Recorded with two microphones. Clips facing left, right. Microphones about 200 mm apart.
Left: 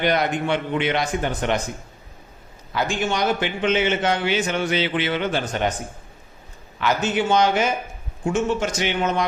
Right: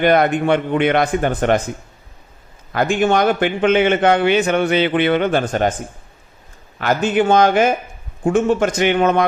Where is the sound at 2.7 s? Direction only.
55° right (ahead or behind).